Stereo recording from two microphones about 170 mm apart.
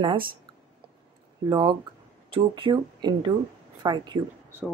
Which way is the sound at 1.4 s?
25° right (ahead or behind).